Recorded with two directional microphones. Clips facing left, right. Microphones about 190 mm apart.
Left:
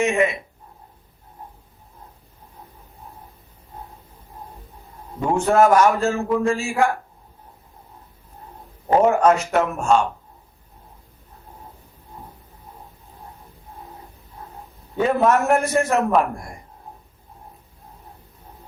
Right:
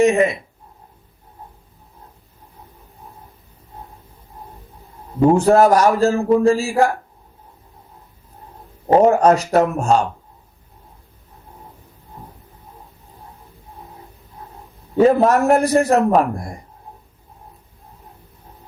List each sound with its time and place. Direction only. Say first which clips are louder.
0.0 s a man's voice: right 5 dB; 35° right (ahead or behind)
5.4 s a man's voice: left 1 dB; 35° right (ahead or behind)
8.9 s a man's voice: right 3 dB; 35° right (ahead or behind)
14.9 s a man's voice: right 5 dB; 35° right (ahead or behind)